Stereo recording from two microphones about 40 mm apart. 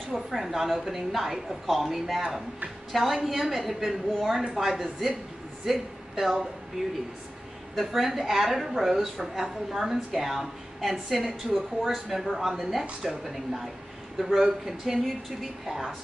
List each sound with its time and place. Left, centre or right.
0.1 s a woman's voice: centre
7.7 s a woman's voice: centre
14.8 s speech: centre